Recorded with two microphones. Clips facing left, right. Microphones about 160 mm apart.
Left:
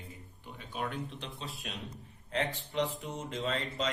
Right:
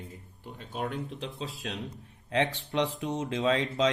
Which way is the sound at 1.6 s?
90° right.